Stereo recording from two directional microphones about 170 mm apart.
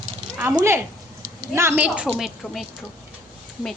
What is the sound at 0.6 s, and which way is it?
A woman's voice, 15° right (ahead or behind).